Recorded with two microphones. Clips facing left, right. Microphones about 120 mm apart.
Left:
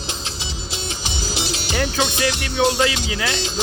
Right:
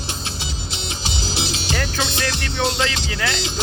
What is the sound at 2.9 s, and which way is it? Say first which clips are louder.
Speech: left 1 dB; 15° left (ahead or behind).